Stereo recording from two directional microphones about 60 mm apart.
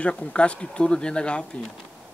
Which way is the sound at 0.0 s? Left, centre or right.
Centre.